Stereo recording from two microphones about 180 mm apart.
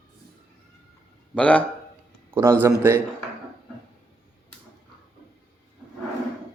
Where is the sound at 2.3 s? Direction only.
15° right (ahead or behind).